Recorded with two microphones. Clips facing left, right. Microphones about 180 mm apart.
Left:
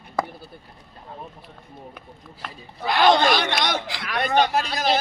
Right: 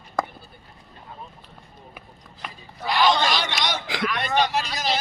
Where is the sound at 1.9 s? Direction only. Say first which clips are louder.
Left 3 dB; 10° right (ahead or behind).